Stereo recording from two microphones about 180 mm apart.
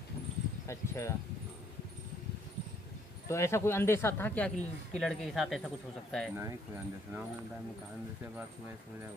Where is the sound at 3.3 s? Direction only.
15° left (ahead or behind).